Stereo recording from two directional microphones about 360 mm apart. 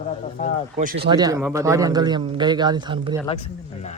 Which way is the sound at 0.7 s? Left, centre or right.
Centre.